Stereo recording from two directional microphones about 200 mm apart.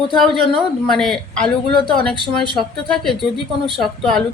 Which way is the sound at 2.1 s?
25° right (ahead or behind).